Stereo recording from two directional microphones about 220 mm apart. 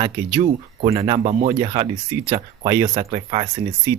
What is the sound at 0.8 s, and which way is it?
Speech, 25° right (ahead or behind).